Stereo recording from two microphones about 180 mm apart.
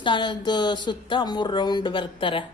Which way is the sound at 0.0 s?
25° left (ahead or behind).